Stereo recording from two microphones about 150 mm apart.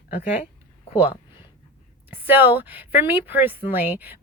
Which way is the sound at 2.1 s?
10° right (ahead or behind).